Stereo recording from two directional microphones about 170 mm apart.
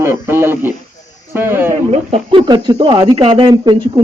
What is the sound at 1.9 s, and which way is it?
Speech, 40° right (ahead or behind).